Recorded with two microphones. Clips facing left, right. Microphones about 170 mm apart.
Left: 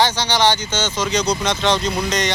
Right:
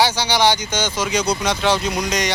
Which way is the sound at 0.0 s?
10° right (ahead or behind).